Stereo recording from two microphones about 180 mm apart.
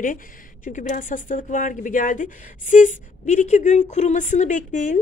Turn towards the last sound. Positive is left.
turn(degrees=45)  # may be behind; listen again after turning